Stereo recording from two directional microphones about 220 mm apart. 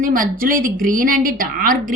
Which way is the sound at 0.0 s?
40° right (ahead or behind).